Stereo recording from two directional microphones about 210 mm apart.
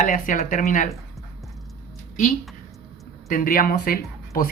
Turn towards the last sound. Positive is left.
turn(degrees=45)  # may be behind; listen again after turning